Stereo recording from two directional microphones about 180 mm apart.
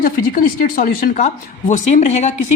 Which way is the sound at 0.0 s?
50° left (ahead or behind).